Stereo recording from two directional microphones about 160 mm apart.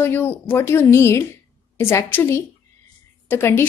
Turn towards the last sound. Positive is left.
turn(degrees=15)  # may be behind; listen again after turning